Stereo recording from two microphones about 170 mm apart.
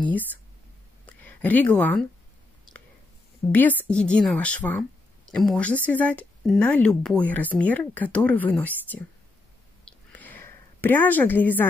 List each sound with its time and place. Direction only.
1.2 s speech: 10° left (ahead or behind)
3.4 s a woman's voice: 20° left (ahead or behind)
3.8 s speech: 5° left (ahead or behind)
9.8 s a sound: 10° left (ahead or behind)